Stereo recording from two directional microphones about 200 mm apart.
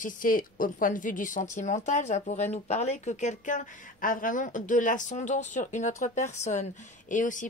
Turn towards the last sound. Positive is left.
turn(degrees=40)  # may be behind; listen again after turning